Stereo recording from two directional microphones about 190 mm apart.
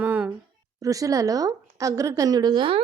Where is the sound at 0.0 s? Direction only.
10° right (ahead or behind).